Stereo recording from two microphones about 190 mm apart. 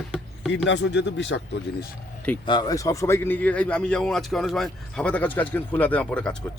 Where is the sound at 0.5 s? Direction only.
70° left (ahead or behind).